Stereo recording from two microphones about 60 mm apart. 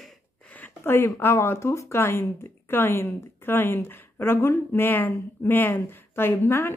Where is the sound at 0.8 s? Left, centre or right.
Left.